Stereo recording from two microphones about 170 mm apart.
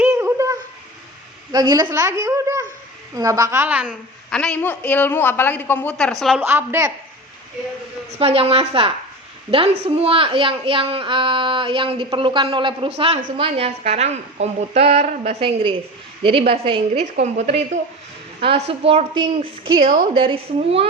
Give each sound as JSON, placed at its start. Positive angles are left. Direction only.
{"t": 0.0, "sound": "a sound", "side_deg": -15}
{"t": 1.5, "sound": "a woman's voice", "side_deg": -25}
{"t": 4.3, "sound": "a man's voice", "side_deg": 5}
{"t": 6.4, "sound": "a woman's voice", "side_deg": -15}
{"t": 8.2, "sound": "a woman's voice", "side_deg": -35}